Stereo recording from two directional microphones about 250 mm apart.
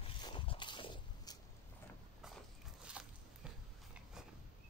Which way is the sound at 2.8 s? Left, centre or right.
Centre.